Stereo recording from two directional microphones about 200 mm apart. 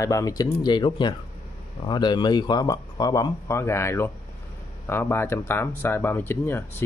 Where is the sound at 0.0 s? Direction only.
15° left (ahead or behind).